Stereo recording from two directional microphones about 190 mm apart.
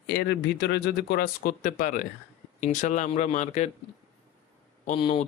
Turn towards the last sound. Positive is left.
turn(degrees=30)  # may be behind; listen again after turning